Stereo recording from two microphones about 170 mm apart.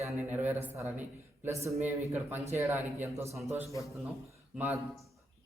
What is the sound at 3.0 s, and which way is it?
Speech, 15° right (ahead or behind).